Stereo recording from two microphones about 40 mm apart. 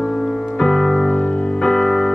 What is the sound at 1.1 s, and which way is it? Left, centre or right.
Music, left.